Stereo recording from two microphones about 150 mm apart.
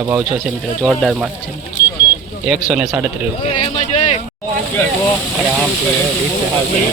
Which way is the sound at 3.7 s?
45° left (ahead or behind).